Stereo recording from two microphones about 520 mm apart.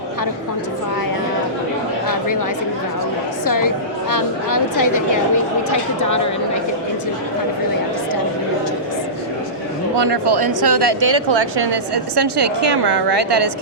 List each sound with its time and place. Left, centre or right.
2.0 s a sound: left
3.4 s speech: left
10.0 s speech: right